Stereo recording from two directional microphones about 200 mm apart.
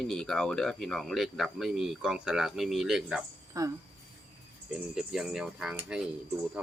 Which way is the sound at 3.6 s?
15° right (ahead or behind).